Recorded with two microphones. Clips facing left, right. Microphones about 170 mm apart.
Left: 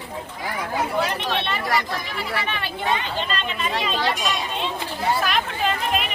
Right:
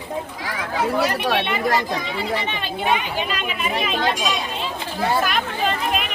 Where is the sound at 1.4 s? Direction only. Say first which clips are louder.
Right 3 dB; 15° right (ahead or behind).